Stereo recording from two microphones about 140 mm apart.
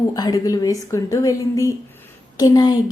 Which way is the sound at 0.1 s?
25° left (ahead or behind).